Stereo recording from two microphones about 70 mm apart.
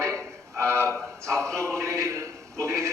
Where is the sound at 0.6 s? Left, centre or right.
Right.